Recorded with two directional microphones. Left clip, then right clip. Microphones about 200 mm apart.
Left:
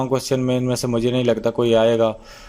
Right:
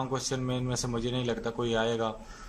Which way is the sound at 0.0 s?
40° left (ahead or behind).